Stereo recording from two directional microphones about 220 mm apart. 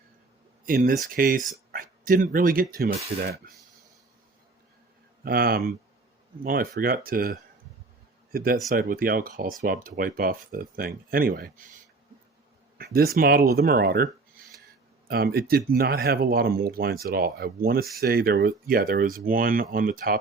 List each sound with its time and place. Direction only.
0.6 s speech: 40° right (ahead or behind)
5.2 s speech: 45° right (ahead or behind)